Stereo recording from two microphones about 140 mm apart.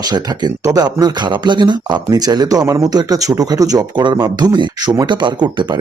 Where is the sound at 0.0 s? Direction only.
30° right (ahead or behind).